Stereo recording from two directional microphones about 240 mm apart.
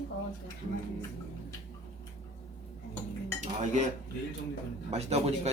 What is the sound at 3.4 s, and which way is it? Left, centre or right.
Speech, right.